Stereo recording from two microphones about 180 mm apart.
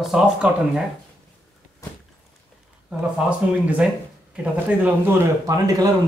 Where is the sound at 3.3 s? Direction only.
5° right (ahead or behind).